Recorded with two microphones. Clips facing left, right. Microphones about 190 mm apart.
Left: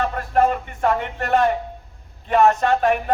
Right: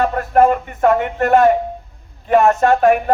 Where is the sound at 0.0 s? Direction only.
50° right (ahead or behind).